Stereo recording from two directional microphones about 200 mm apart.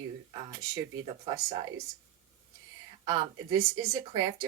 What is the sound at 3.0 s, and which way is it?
Speech, 20° right (ahead or behind).